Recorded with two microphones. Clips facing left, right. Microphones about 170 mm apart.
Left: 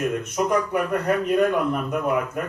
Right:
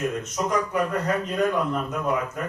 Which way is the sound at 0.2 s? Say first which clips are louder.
Left 3 dB; 60° left (ahead or behind).